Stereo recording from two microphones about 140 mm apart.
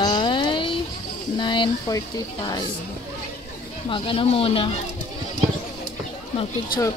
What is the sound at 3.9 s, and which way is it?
Speech, 40° left (ahead or behind).